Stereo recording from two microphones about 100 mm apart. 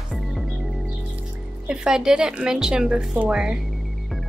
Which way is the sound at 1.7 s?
5° right (ahead or behind).